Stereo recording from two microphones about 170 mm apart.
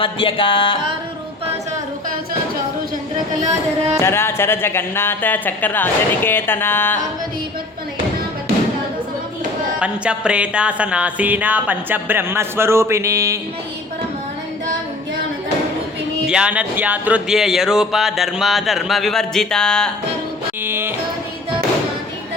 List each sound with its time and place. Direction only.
0.0 s music: 30° left (ahead or behind)
4.0 s speech: 15° left (ahead or behind)
9.8 s music: 5° right (ahead or behind)
16.2 s speech: 5° right (ahead or behind)
20.7 s music: 15° right (ahead or behind)